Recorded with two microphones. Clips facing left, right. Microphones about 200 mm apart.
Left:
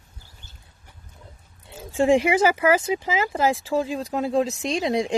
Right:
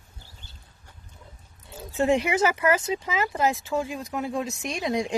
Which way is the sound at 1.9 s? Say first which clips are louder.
Left 4 dB; 30° left (ahead or behind).